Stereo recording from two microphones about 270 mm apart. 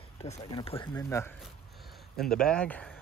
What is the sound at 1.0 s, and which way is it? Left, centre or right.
Speech, centre.